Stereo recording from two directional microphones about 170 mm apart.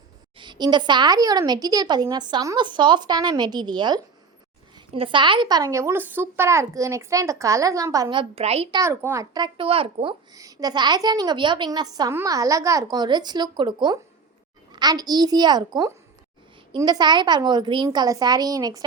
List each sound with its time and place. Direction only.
0.3 s speech: 25° right (ahead or behind)
8.8 s a child's voice: 15° right (ahead or behind)
9.3 s a woman's voice: 30° right (ahead or behind)